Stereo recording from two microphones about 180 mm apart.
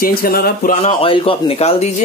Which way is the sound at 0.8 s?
35° left (ahead or behind).